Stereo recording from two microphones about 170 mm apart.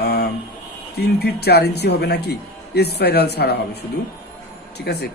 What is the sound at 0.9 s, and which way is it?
Speech, 70° left (ahead or behind).